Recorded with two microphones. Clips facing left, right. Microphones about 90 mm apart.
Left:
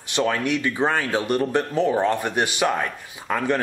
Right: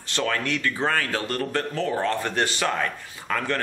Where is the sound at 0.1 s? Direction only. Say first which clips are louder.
Left 4 dB; 15° left (ahead or behind).